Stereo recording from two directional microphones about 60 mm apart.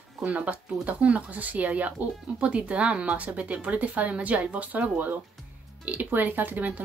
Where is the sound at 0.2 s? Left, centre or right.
Right.